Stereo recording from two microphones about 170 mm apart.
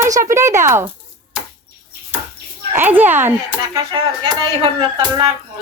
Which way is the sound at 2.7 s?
10° right (ahead or behind).